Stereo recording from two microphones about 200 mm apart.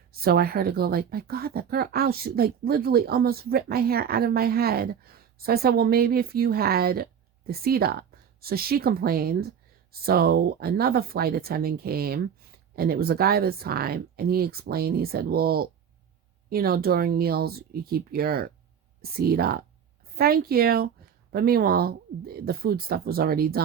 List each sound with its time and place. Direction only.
0.1 s speech: 50° right (ahead or behind)